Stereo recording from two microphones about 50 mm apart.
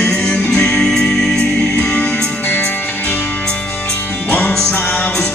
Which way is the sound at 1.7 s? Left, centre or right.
Left.